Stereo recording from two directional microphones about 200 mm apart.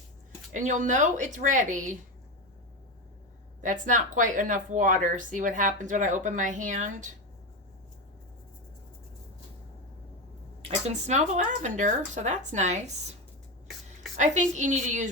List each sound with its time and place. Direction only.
0.5 s speech: 40° right (ahead or behind)
3.6 s speech: 40° right (ahead or behind)
10.6 s speech: 35° right (ahead or behind)
14.2 s speech: 40° right (ahead or behind)